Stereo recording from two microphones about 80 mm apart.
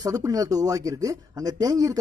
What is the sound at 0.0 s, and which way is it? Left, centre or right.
Speech, right.